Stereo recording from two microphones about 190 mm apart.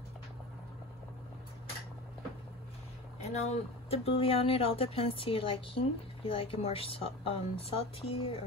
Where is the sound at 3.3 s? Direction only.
35° left (ahead or behind).